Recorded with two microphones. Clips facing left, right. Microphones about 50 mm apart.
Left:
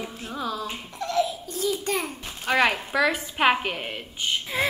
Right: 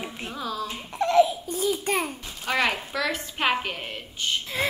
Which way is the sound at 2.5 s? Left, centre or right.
Centre.